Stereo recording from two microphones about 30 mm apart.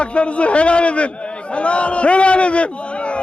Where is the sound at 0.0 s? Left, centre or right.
Left.